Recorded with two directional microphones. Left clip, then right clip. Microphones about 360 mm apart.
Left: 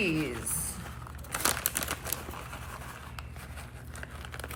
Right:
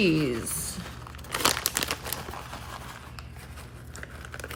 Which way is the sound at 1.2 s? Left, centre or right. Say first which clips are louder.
Right 6 dB; centre.